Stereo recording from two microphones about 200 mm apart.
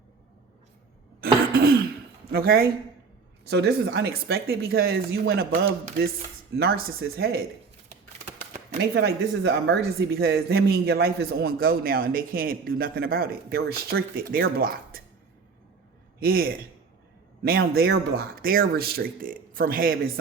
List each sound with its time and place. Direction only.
1.2 s cough: 50° right (ahead or behind)
2.3 s speech: 50° right (ahead or behind)
8.8 s speech: 55° right (ahead or behind)
16.2 s speech: 50° right (ahead or behind)